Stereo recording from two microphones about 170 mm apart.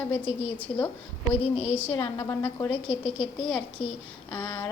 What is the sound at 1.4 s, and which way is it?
Speech, 35° left (ahead or behind).